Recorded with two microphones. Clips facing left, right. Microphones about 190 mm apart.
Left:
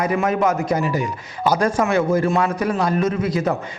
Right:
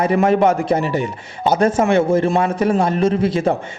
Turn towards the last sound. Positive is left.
turn(degrees=-25)  # may be behind; listen again after turning